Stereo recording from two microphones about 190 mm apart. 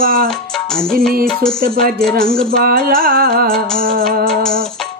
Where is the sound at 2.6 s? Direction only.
50° right (ahead or behind).